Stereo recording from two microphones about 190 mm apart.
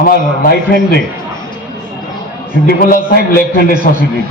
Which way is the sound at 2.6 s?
50° left (ahead or behind).